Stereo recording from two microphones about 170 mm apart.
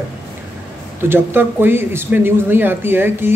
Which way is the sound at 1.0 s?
15° right (ahead or behind).